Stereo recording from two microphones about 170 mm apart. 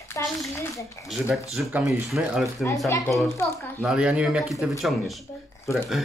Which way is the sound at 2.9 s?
20° left (ahead or behind).